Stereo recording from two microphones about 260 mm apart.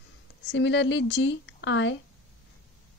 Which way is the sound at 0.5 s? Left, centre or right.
Left.